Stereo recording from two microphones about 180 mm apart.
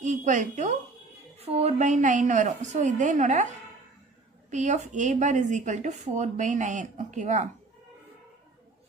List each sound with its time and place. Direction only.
0.0 s a woman's voice: 45° right (ahead or behind)